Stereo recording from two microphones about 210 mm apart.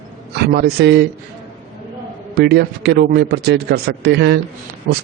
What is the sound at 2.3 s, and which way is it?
A man's voice, 50° right (ahead or behind).